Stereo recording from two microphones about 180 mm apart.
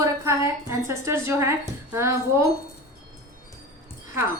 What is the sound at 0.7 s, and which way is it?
Wind chime, 15° right (ahead or behind).